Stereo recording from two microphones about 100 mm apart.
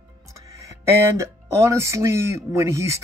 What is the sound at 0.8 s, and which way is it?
Speech, 25° right (ahead or behind).